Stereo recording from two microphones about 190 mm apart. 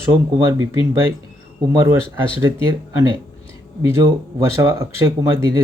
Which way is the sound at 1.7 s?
15° right (ahead or behind).